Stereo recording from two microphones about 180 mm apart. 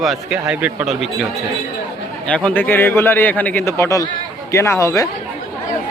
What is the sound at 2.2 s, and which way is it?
A man's voice, 5° left (ahead or behind).